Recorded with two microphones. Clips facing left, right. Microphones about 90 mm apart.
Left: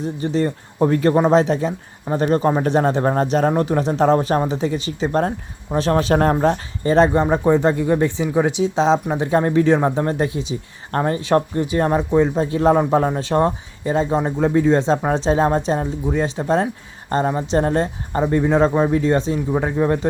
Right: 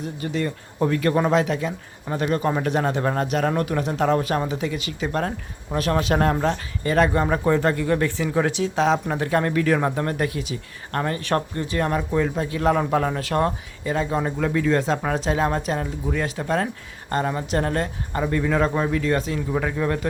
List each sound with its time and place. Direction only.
0.0 s speech: 30° left (ahead or behind)